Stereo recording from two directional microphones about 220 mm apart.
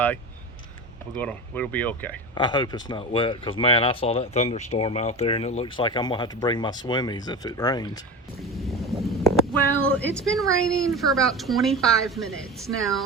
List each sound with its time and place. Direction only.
1.2 s speech: 5° left (ahead or behind)
2.3 s speech: 20° left (ahead or behind)
8.4 s a sound: centre (ahead or behind)
10.2 s a woman's voice: centre (ahead or behind)